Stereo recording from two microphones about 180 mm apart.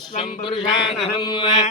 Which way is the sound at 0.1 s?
30° left (ahead or behind).